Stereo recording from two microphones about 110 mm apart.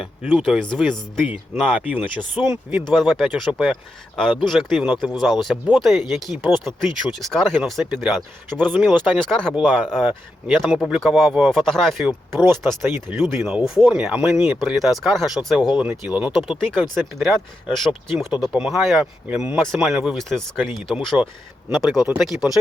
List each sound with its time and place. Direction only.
0.0 s speech: 10° right (ahead or behind)
0.4 s speech: 5° left (ahead or behind)
1.5 s speech: 15° right (ahead or behind)
2.8 s speech: 5° left (ahead or behind)